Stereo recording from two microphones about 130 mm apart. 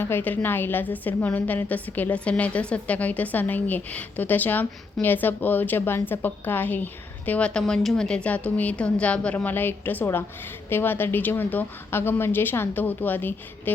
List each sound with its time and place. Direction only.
0.0 s a woman's voice: 15° left (ahead or behind)